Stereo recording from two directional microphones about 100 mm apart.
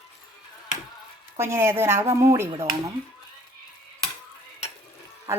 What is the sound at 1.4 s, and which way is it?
Speech, 25° right (ahead or behind).